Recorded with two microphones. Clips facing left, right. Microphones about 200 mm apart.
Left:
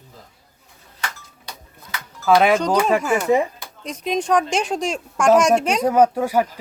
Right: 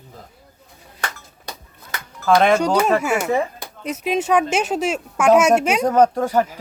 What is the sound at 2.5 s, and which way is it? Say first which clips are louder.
A woman's voice: right 1 dB; 10° right (ahead or behind).